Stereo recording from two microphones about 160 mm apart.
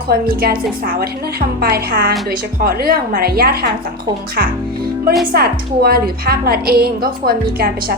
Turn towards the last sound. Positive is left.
turn(degrees=-70)  # may be behind; listen again after turning